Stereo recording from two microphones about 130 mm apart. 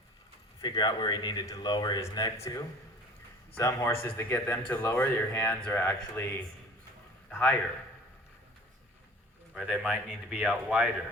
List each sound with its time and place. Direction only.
0.6 s a man's voice: 30° left (ahead or behind); by 7.5 s 15° left (ahead or behind)
9.6 s speech: 10° right (ahead or behind)